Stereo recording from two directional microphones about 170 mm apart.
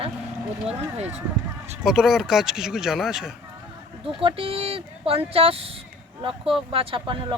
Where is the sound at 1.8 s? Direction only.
5° right (ahead or behind).